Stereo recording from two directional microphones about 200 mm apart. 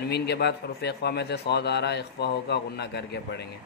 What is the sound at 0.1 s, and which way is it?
Speech, 55° left (ahead or behind).